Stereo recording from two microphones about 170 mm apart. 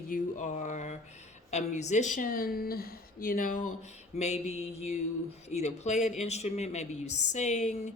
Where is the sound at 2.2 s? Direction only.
55° left (ahead or behind).